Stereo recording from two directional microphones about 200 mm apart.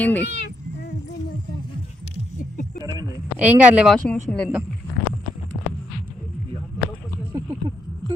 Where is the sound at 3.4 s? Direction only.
10° right (ahead or behind).